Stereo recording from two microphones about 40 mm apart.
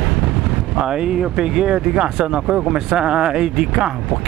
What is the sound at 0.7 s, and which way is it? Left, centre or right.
Speech, centre.